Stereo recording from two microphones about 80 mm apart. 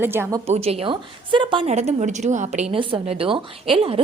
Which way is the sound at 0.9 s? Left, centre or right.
Right.